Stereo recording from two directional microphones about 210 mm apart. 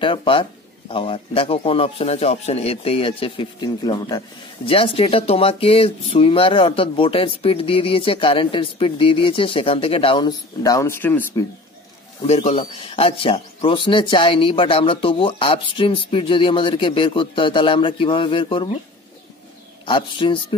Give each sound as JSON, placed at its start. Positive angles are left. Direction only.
{"t": 0.0, "sound": "speech", "side_deg": 25}
{"t": 12.3, "sound": "speech", "side_deg": 30}
{"t": 19.8, "sound": "speech", "side_deg": 25}